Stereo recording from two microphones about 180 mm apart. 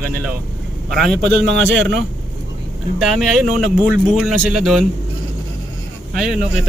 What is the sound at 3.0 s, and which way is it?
Speech, centre (ahead or behind).